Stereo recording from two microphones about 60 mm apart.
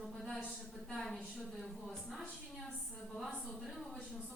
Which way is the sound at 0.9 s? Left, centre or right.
Centre.